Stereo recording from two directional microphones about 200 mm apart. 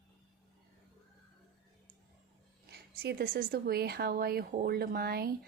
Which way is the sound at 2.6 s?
55° right (ahead or behind).